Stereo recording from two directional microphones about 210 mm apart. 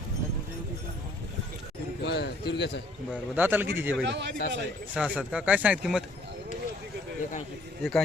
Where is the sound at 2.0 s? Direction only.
50° left (ahead or behind).